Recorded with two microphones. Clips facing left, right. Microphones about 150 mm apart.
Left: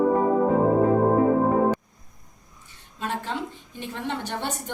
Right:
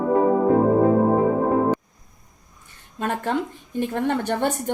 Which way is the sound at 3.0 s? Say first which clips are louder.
Right 5 dB; 55° right (ahead or behind).